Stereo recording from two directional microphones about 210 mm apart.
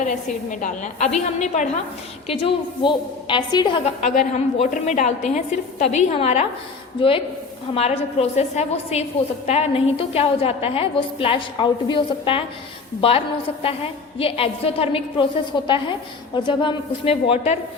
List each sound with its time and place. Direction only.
0.6 s a woman's voice: 35° left (ahead or behind)
4.0 s a woman's voice: 35° left (ahead or behind)
7.7 s a woman's voice: 30° left (ahead or behind)